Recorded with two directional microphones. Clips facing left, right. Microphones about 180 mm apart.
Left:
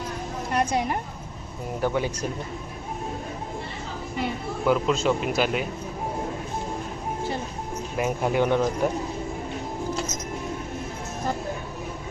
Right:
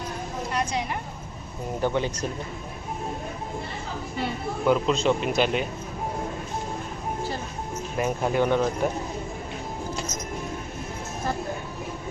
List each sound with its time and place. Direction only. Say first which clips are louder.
0.5 s a sound: left 5 dB; 55° left (ahead or behind)
1.8 s speech: even; 5° left (ahead or behind)
4.2 s speech: even; 5° left (ahead or behind)
7.9 s speech: even; 10° left (ahead or behind)